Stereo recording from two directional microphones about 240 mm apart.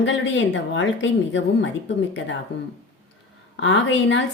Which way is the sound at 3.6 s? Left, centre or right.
Left.